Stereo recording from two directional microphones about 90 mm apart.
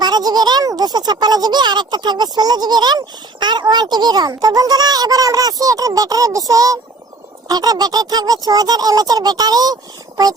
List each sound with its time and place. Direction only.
0.0 s a child's voice: 50° right (ahead or behind)